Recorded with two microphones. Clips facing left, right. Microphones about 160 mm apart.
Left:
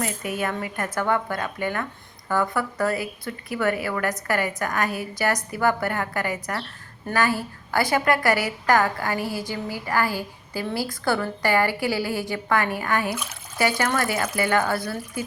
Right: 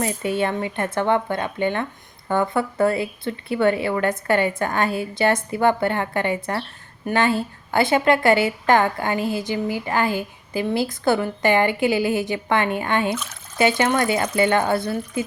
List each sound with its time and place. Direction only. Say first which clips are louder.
0.0 s speech: right 5 dB; 25° right (ahead or behind)